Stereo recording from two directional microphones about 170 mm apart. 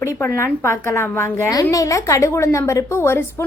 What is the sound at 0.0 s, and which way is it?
A woman's voice, 15° left (ahead or behind).